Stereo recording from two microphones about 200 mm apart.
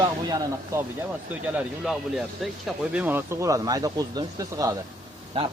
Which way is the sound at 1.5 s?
Centre (ahead or behind).